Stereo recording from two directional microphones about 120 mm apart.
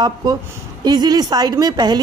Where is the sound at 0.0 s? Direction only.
35° right (ahead or behind).